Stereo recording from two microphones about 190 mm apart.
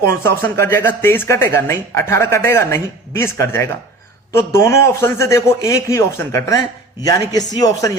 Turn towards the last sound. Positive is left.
turn(degrees=20)  # may be behind; listen again after turning